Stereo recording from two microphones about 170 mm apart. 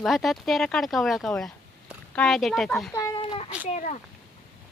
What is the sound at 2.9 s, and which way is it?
Speech, 20° left (ahead or behind).